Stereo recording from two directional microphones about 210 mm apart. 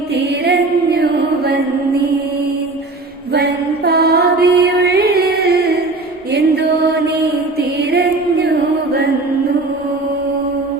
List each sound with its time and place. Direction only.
0.1 s music: 50° right (ahead or behind)
3.8 s music: 50° right (ahead or behind)